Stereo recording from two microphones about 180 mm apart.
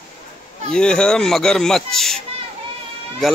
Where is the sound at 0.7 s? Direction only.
5° left (ahead or behind).